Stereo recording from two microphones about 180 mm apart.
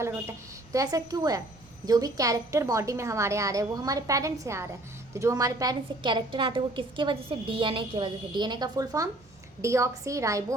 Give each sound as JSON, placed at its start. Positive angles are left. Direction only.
{"t": 0.0, "sound": "a woman's voice", "side_deg": -15}